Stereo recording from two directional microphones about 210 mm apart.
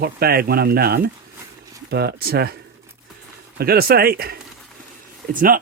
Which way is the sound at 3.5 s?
45° right (ahead or behind).